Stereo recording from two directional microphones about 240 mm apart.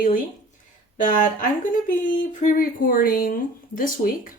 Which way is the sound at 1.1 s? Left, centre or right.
Left.